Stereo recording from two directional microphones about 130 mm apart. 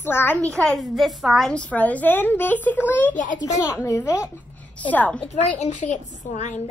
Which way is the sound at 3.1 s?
80° left.